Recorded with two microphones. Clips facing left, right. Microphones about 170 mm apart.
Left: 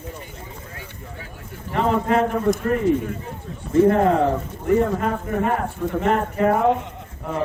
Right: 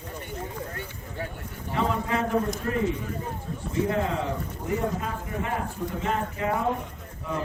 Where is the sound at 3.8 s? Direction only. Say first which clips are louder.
Left 10 dB; 60° left (ahead or behind).